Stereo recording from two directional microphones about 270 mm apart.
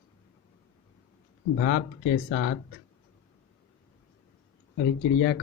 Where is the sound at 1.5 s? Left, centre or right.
Left.